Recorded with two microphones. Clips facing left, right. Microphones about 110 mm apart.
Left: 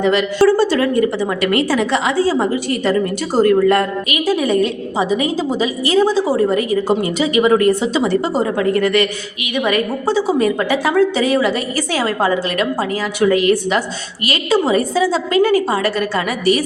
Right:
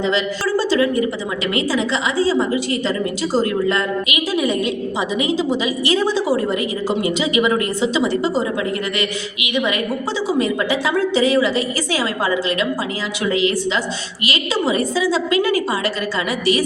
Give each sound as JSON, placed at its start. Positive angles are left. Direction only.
{"t": 0.0, "sound": "a woman's voice", "side_deg": 60}
{"t": 4.3, "sound": "a woman's voice", "side_deg": 45}